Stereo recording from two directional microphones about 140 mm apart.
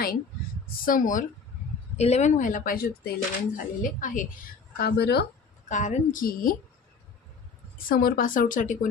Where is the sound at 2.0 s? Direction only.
55° left (ahead or behind); by 3.1 s 90° left.